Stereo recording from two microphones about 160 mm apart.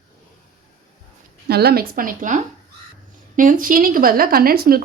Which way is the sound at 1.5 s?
80° right.